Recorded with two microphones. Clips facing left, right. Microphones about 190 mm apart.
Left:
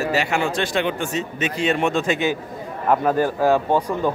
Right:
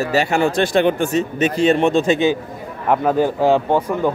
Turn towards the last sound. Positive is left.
turn(degrees=-20)  # may be behind; listen again after turning